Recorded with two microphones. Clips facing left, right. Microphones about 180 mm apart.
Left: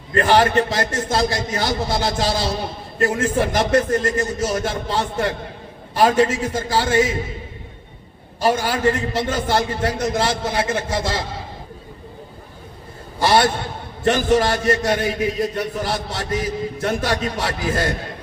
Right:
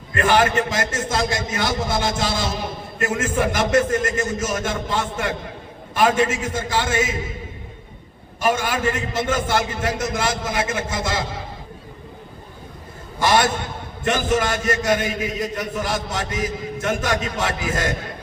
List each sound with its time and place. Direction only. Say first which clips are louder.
0.1 s a man's voice: left 2 dB; 35° left (ahead or behind)
8.4 s a man's voice: left 2 dB; 35° left (ahead or behind)
13.1 s a man's voice: left 2 dB; 35° left (ahead or behind)